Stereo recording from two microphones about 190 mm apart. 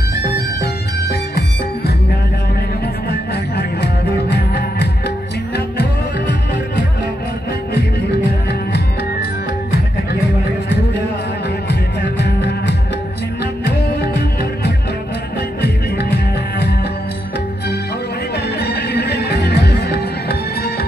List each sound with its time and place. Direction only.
0.1 s music: 60° left (ahead or behind)
3.1 s music: 60° left (ahead or behind)
12.2 s music: 65° left (ahead or behind)
15.6 s music: 60° left (ahead or behind)
18.6 s music: 60° left (ahead or behind)